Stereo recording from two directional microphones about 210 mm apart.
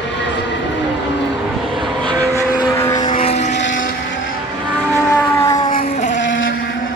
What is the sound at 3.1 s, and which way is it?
Vehicle, 30° left (ahead or behind).